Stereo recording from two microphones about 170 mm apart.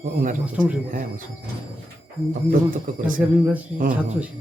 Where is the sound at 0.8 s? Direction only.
55° right (ahead or behind).